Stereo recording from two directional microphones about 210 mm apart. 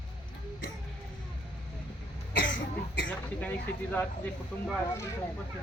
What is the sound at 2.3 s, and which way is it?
Cough, 60° left (ahead or behind).